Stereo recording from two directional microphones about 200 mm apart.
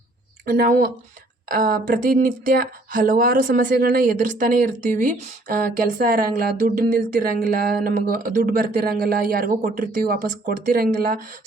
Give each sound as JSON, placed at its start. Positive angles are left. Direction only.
{"t": 0.4, "sound": "speech", "side_deg": -45}